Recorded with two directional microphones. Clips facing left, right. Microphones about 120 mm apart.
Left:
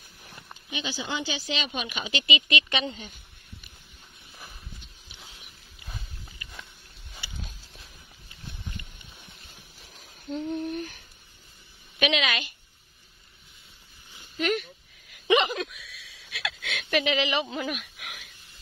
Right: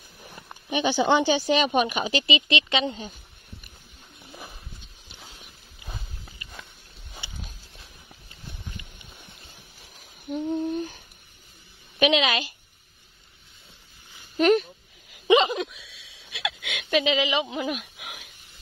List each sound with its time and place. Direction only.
0.7 s speech: 70° right (ahead or behind); by 3.0 s 20° right (ahead or behind)
5.9 s horse: 30° right (ahead or behind)
10.2 s humming: 20° right (ahead or behind)
12.0 s speech: 30° right (ahead or behind)
14.4 s a sound: 30° right (ahead or behind)